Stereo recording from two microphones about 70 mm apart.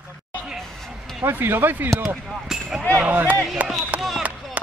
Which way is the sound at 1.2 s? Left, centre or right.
Right.